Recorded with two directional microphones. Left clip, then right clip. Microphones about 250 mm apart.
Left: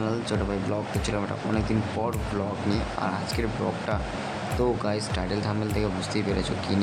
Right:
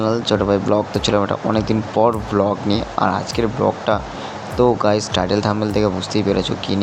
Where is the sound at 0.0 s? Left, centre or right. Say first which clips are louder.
Right 11 dB; right.